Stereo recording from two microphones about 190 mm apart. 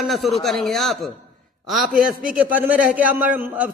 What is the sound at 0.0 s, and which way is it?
A man's voice, centre (ahead or behind).